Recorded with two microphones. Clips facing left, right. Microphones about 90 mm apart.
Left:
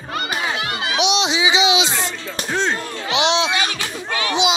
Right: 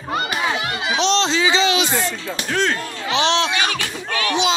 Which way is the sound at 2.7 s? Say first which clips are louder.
Even; 15° left (ahead or behind).